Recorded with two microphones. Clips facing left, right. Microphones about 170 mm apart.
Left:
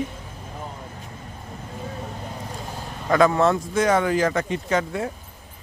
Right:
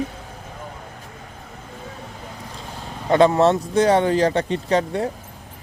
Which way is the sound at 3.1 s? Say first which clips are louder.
Right 3 dB; 30° right (ahead or behind).